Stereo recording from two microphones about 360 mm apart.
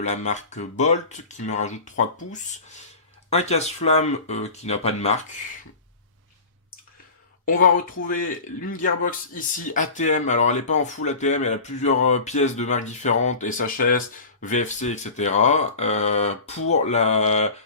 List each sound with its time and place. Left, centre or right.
0.0 s speech: centre
7.4 s speech: left